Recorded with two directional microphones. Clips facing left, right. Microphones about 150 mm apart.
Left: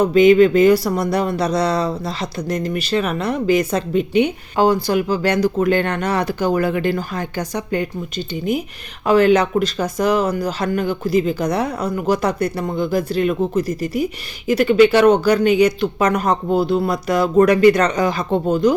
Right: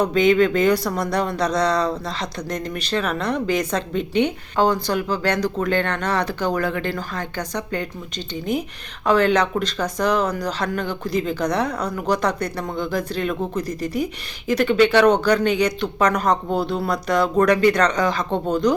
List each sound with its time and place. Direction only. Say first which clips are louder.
0.0 s speech: left 5 dB; 10° left (ahead or behind)